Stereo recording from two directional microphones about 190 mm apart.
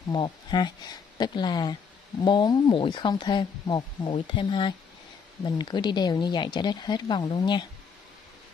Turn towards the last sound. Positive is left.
turn(degrees=25)  # may be behind; listen again after turning